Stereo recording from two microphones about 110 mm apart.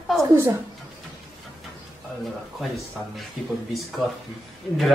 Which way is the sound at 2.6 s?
Centre (ahead or behind).